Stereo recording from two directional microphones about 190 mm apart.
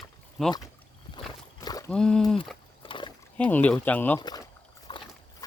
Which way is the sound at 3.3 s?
10° left (ahead or behind).